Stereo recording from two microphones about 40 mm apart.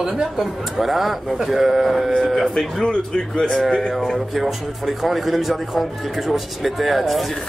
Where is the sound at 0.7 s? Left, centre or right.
Centre.